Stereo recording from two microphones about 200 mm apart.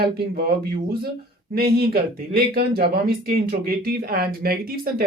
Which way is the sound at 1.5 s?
50° right (ahead or behind).